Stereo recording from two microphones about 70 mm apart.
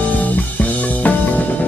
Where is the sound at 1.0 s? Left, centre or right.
Left.